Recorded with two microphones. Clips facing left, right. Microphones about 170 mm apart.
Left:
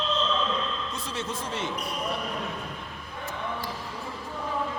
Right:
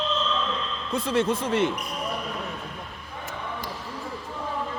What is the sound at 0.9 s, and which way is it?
Speech, 55° right (ahead or behind).